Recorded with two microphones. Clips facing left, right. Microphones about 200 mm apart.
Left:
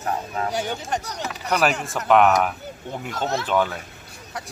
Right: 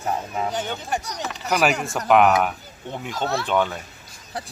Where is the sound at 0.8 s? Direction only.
10° right (ahead or behind).